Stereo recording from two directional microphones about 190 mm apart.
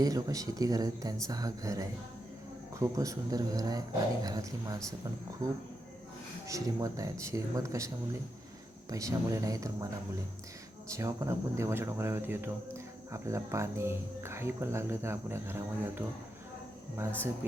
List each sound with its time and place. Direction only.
0.0 s speech: 20° right (ahead or behind)
8.9 s speech: 15° right (ahead or behind)